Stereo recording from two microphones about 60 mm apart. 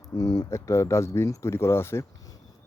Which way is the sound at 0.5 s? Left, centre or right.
Left.